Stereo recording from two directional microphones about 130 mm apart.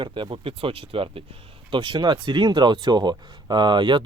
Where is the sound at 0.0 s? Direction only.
40° right (ahead or behind).